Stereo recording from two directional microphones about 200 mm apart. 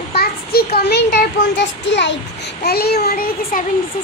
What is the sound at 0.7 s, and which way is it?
A child's voice, 55° left (ahead or behind).